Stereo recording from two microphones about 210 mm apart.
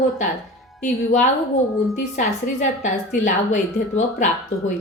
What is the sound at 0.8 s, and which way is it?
A woman's voice, 35° left (ahead or behind).